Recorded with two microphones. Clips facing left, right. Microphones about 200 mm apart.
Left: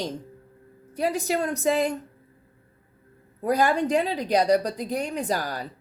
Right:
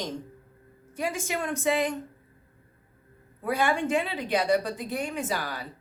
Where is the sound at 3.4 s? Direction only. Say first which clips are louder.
Left 4 dB; 40° left (ahead or behind).